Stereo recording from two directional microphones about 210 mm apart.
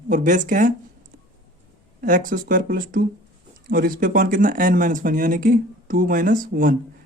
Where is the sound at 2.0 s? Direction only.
40° right (ahead or behind).